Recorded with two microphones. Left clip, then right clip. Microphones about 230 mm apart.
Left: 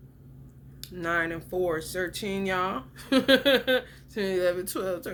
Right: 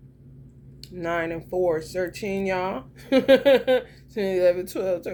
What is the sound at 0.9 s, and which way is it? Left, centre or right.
Speech, centre.